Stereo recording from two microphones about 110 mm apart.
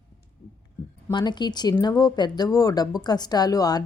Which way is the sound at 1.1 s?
40° left (ahead or behind).